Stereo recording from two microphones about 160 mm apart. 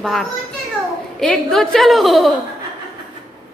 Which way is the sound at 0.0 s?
Centre (ahead or behind).